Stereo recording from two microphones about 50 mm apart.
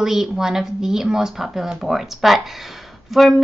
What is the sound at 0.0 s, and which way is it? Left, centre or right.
A child's voice, centre.